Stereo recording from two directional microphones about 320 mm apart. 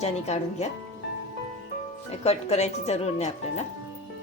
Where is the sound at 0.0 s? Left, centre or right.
Centre.